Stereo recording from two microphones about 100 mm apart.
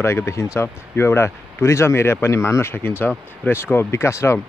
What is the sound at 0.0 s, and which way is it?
Speech, 25° left (ahead or behind).